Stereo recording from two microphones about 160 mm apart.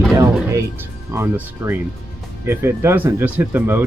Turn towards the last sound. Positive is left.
turn(degrees=-10)  # may be behind; listen again after turning